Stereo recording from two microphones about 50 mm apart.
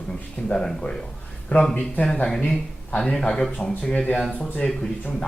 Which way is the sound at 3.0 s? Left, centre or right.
Centre.